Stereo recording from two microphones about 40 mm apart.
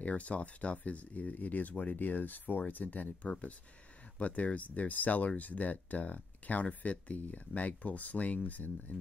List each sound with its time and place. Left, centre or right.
0.0 s speech: left